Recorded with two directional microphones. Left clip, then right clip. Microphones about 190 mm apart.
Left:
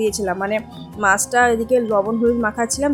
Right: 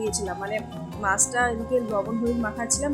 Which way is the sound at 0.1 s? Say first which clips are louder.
Left 8 dB; 35° left (ahead or behind).